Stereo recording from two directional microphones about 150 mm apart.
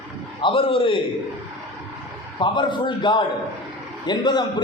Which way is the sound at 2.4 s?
30° left (ahead or behind).